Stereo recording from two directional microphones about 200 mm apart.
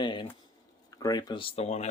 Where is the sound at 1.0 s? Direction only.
20° left (ahead or behind).